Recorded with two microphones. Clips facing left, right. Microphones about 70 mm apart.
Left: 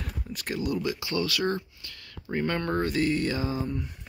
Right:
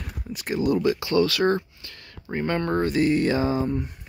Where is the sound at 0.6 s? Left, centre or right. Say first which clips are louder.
Right 8 dB; right.